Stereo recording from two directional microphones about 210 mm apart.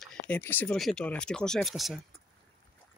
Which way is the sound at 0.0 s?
5° left (ahead or behind).